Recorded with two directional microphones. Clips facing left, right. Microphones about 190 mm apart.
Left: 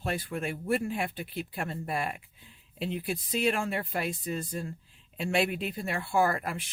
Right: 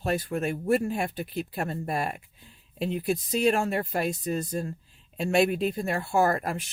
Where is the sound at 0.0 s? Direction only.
40° right (ahead or behind).